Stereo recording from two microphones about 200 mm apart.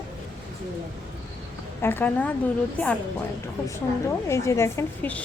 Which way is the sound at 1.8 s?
10° left (ahead or behind).